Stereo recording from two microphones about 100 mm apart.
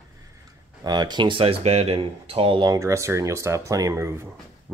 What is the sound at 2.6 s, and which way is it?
Speech, 35° right (ahead or behind).